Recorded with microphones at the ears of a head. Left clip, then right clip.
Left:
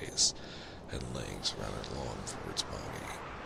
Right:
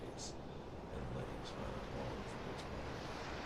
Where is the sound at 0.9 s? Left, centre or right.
Left.